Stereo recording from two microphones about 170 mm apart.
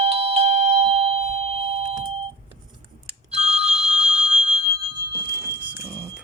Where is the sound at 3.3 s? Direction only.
40° right (ahead or behind).